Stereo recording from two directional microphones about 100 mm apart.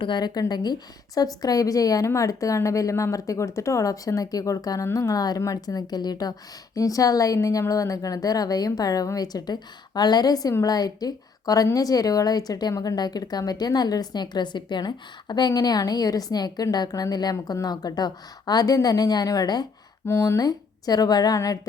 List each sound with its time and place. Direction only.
0.0 s a woman's voice: 50° left (ahead or behind)
20.1 s a woman's voice: 30° left (ahead or behind)